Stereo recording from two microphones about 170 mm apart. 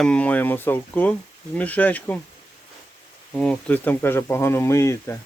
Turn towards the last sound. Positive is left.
turn(degrees=15)  # may be behind; listen again after turning